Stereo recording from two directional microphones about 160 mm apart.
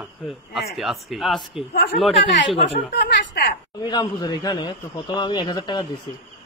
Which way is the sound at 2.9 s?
90° left.